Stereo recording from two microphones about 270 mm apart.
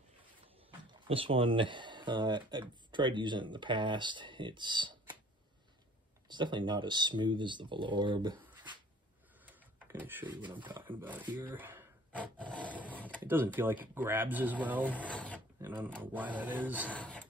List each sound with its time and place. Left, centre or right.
0.9 s speech: centre
6.2 s speech: centre
9.5 s a sound: centre
10.5 s speech: centre
11.3 s a sound: centre
12.4 s speech: centre
12.9 s a sound: centre
13.2 s speech: centre
14.9 s speech: centre
15.6 s speech: centre
16.9 s filing: centre